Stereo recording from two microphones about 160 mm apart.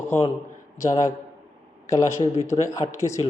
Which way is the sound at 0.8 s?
20° left (ahead or behind).